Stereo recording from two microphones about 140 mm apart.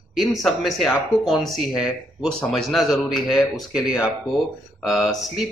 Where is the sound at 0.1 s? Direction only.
Centre (ahead or behind).